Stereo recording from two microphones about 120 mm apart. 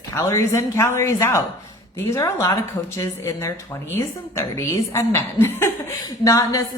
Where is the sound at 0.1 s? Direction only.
25° left (ahead or behind).